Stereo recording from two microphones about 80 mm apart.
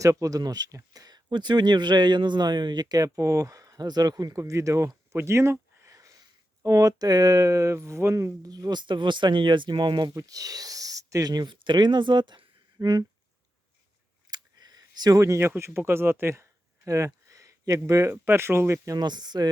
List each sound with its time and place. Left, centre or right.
0.0 s speech: right
10.2 s speech: right
12.8 s speech: right
14.3 s a sound: right
15.2 s speech: right
17.2 s a sound: right
18.1 s speech: right
18.9 s speech: right